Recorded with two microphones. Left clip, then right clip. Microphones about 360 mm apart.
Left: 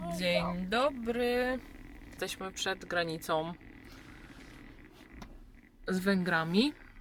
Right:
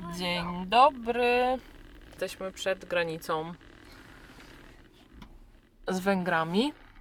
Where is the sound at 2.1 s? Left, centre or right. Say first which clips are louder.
Right 3 dB; centre.